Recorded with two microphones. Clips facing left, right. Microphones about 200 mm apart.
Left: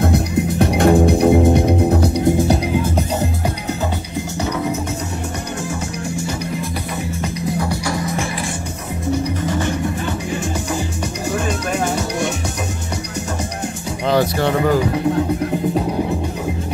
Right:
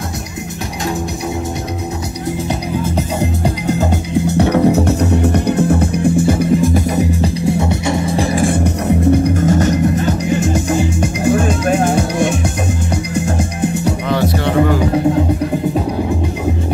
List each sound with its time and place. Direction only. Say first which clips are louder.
0.1 s music: left 8 dB; 55° left (ahead or behind)
4.3 s music: right 10 dB; 65° right (ahead or behind); by 7.2 s 45° right (ahead or behind)
7.4 s music: right 3 dB; 25° right (ahead or behind); by 12.3 s 50° right (ahead or behind)